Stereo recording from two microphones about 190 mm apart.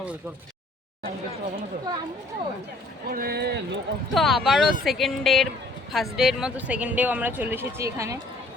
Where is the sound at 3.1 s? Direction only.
55° right (ahead or behind).